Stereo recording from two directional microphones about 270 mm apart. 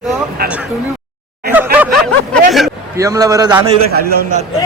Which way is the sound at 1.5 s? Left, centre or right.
Centre.